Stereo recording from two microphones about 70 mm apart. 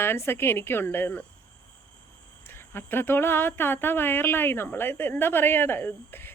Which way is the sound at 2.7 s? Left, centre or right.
Left.